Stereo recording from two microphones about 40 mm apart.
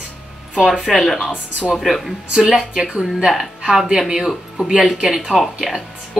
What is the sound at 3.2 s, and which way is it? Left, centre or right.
Speech, centre.